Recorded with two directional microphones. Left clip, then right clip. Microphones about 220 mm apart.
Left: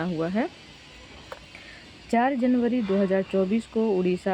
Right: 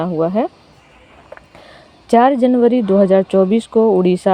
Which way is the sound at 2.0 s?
30° right (ahead or behind).